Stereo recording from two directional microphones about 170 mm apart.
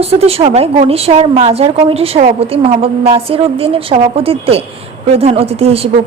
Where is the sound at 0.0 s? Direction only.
35° right (ahead or behind).